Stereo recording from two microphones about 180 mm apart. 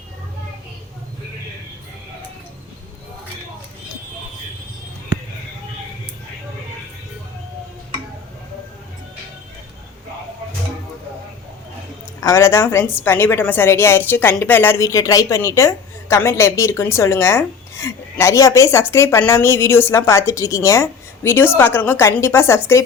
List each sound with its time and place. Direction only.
12.2 s speech: 15° left (ahead or behind)